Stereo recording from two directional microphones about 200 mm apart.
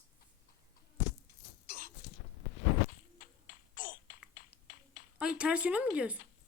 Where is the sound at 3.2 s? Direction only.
45° left (ahead or behind).